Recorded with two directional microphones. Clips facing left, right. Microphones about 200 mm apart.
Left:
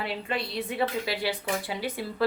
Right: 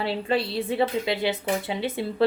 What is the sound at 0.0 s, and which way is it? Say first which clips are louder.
A woman's voice: right 6 dB; 30° right (ahead or behind).